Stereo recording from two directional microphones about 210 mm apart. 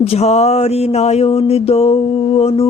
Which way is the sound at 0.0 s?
30° left (ahead or behind).